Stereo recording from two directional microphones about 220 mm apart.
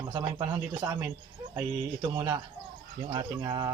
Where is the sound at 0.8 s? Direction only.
10° right (ahead or behind).